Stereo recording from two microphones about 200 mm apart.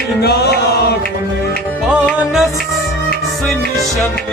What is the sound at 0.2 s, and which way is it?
Chant, 55° left (ahead or behind).